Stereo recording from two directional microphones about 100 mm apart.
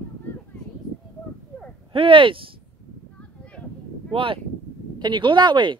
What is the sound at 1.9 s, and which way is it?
Speech, 60° right (ahead or behind).